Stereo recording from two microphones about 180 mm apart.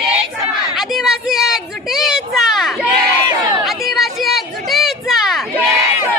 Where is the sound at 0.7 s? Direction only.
Centre (ahead or behind).